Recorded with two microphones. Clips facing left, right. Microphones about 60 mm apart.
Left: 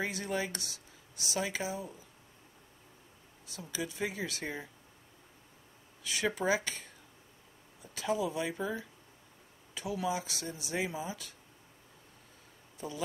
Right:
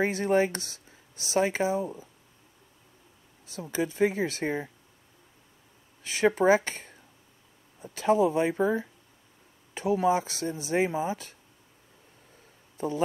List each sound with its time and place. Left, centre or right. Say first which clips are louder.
0.0 s speech: right 11 dB; right
3.5 s speech: right 10 dB; right
6.0 s speech: right 9 dB; right
12.7 s speech: right 10 dB; right